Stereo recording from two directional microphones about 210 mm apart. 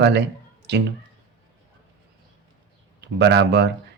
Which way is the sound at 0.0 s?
50° right (ahead or behind).